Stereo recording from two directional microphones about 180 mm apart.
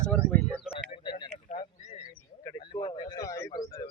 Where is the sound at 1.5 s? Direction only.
45° left (ahead or behind).